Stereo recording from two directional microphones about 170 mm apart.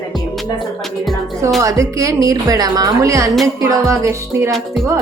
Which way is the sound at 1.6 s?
20° right (ahead or behind).